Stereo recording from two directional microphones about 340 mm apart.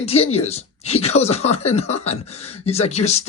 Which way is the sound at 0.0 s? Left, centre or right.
Centre.